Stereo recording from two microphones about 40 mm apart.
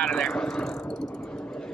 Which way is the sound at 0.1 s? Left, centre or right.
Centre.